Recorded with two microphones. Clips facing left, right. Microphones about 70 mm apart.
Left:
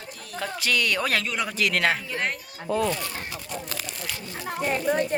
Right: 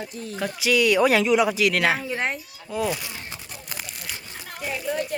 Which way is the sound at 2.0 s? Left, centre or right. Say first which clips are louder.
Right 2 dB; centre.